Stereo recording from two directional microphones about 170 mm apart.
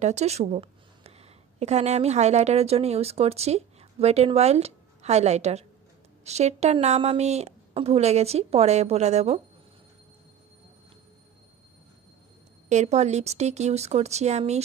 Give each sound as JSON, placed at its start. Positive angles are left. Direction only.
{"t": 0.0, "sound": "speech", "side_deg": -40}
{"t": 12.6, "sound": "speech", "side_deg": -40}